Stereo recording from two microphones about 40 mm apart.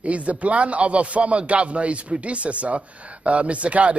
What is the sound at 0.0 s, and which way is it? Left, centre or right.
Speech, right.